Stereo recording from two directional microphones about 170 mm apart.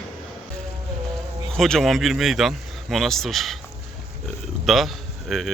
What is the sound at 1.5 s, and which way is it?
Speech, centre (ahead or behind).